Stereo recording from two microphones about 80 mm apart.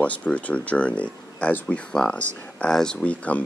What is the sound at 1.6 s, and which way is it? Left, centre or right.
Speech, centre.